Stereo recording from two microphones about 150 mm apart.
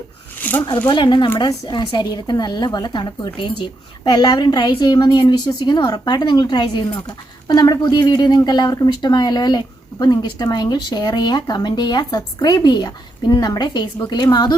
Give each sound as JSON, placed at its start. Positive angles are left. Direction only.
{"t": 0.3, "sound": "zipper", "side_deg": 10}
{"t": 0.9, "sound": "speech", "side_deg": 30}